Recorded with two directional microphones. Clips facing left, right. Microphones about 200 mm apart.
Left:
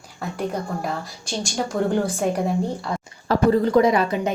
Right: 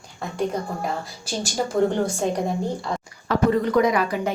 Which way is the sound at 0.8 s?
Centre (ahead or behind).